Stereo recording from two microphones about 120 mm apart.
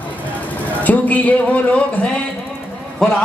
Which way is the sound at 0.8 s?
15° left (ahead or behind).